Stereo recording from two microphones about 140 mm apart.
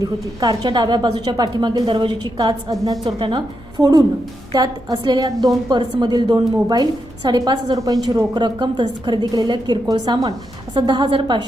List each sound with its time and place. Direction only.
0.0 s a woman's voice: 25° right (ahead or behind)
3.0 s a woman's voice: 35° right (ahead or behind)